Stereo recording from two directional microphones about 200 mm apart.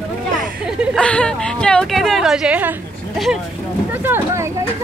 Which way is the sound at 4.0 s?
10° right (ahead or behind).